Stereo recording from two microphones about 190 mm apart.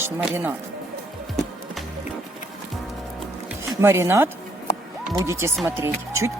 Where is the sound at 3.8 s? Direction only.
15° right (ahead or behind).